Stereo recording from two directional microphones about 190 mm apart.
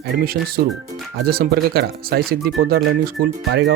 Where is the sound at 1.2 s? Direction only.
55° right (ahead or behind).